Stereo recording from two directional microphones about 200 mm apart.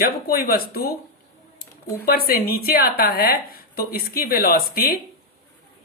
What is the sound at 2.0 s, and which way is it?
A woman's voice, 50° left (ahead or behind).